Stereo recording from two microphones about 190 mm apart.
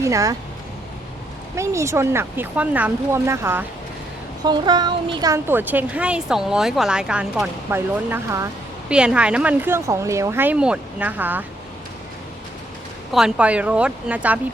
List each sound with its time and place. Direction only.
0.0 s speech: 15° right (ahead or behind)
1.5 s speech: 15° right (ahead or behind)
4.4 s speech: 25° right (ahead or behind)
13.1 s speech: 5° right (ahead or behind)